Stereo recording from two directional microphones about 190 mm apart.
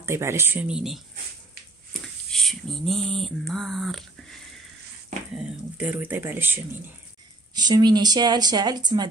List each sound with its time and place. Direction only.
0.0 s speech: 15° right (ahead or behind)
2.3 s a sound: 5° left (ahead or behind)
5.3 s speech: 5° right (ahead or behind)
7.5 s speech: 20° right (ahead or behind)